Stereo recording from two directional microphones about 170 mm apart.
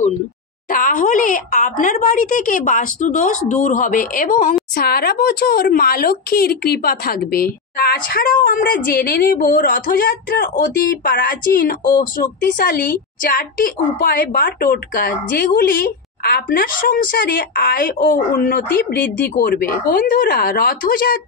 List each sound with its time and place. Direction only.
0.7 s speech: 50° left (ahead or behind)
4.7 s a woman's voice: 65° left (ahead or behind)